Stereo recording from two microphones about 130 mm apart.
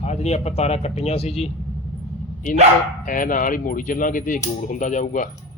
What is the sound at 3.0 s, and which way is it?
Speech, 90° left.